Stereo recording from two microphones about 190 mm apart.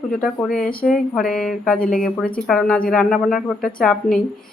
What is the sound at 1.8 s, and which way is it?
Speech, 45° left (ahead or behind).